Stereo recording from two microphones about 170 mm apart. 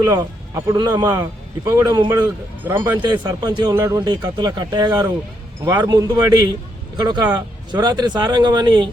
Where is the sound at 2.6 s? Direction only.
10° right (ahead or behind).